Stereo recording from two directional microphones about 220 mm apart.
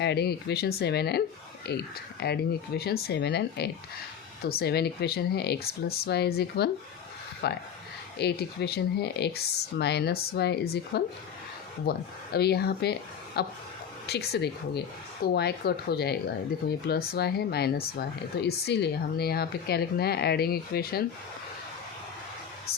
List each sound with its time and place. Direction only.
0.0 s speech: 50° left (ahead or behind)